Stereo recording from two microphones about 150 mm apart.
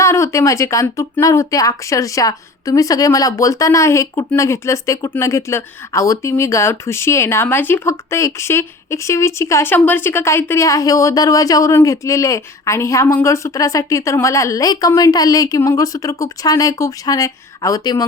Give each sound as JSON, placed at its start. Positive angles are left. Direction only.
{"t": 0.0, "sound": "speech", "side_deg": 20}